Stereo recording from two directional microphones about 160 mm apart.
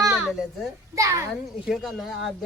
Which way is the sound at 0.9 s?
20° right (ahead or behind).